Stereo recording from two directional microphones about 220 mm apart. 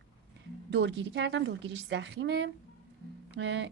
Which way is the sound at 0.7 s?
55° right (ahead or behind).